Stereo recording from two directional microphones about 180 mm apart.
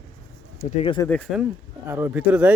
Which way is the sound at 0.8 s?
25° left (ahead or behind).